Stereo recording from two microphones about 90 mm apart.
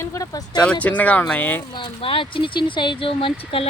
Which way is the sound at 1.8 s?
75° left (ahead or behind).